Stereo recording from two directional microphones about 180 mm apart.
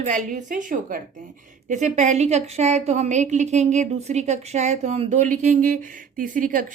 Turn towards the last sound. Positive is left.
turn(degrees=-50)  # may be behind; listen again after turning